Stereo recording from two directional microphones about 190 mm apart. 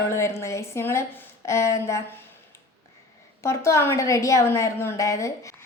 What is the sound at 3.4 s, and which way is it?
A woman's voice, 15° left (ahead or behind).